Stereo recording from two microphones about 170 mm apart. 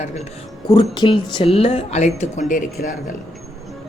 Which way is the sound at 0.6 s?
25° left (ahead or behind).